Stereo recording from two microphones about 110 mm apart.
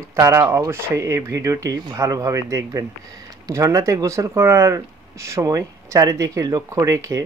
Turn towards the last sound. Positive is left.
turn(degrees=-30)  # may be behind; listen again after turning